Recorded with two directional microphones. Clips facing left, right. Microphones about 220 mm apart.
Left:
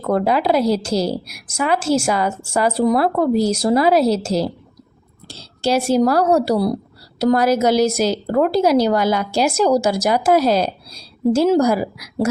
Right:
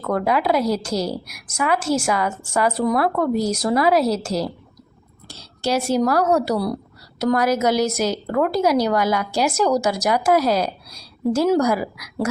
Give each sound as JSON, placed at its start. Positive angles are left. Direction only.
{"t": 0.0, "sound": "a woman's voice", "side_deg": 30}